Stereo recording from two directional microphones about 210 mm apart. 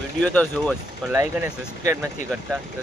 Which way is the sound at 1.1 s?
10° right (ahead or behind).